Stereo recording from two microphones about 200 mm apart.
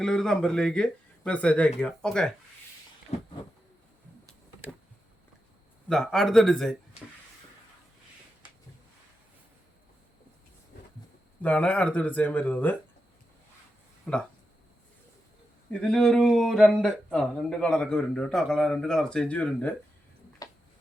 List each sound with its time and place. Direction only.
0.0 s speech: 5° left (ahead or behind)
3.1 s a sound: 30° left (ahead or behind)
5.9 s speech: centre (ahead or behind)
11.4 s speech: 5° left (ahead or behind)
14.0 s speech: 5° left (ahead or behind)
15.7 s speech: 5° left (ahead or behind)
20.4 s a sound: 15° left (ahead or behind)